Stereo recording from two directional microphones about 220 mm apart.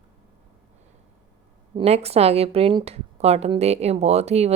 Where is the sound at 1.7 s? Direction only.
30° right (ahead or behind).